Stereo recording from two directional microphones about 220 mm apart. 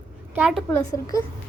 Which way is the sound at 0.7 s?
10° left (ahead or behind).